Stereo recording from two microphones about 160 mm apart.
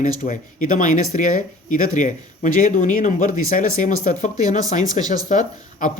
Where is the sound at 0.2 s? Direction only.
55° left (ahead or behind).